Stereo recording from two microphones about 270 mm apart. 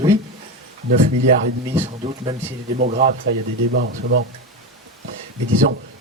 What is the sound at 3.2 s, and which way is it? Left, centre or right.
Speech, right.